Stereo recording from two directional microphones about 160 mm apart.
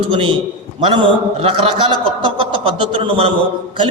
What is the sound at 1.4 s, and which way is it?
A man's voice, 35° right (ahead or behind).